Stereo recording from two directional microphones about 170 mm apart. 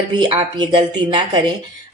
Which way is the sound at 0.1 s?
25° right (ahead or behind).